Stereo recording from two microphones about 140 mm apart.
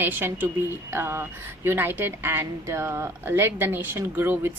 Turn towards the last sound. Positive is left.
turn(degrees=-15)  # may be behind; listen again after turning